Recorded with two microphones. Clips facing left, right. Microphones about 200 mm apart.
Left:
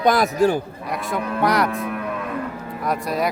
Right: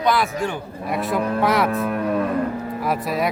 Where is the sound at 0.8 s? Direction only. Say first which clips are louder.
Right 7 dB; centre (ahead or behind).